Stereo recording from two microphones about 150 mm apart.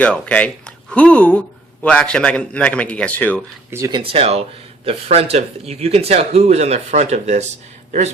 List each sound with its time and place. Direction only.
0.0 s speech: 10° left (ahead or behind)
3.7 s speech: 20° right (ahead or behind)
3.9 s speech: 40° right (ahead or behind)